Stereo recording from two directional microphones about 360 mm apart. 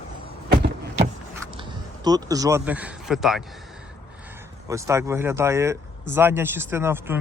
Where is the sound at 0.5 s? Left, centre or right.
Right.